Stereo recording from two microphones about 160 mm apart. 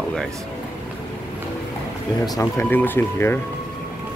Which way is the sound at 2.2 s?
20° left (ahead or behind).